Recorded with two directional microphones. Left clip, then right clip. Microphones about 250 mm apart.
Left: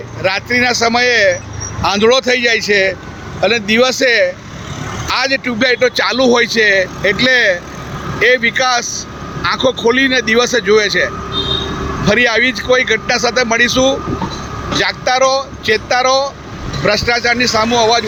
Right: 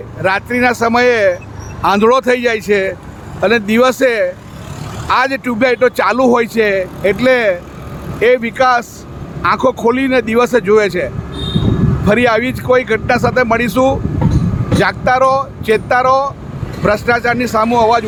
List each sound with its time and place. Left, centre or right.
0.2 s speech: right